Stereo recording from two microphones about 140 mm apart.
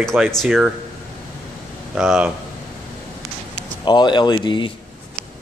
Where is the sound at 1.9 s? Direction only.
5° right (ahead or behind).